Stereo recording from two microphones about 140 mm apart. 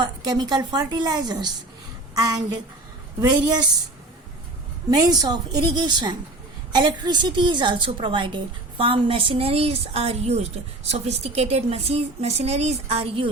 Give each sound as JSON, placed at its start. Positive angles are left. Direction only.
{"t": 0.0, "sound": "a woman's voice", "side_deg": -30}
{"t": 4.9, "sound": "a woman's voice", "side_deg": -25}